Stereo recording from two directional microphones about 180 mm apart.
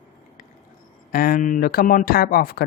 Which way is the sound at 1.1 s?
50° left (ahead or behind).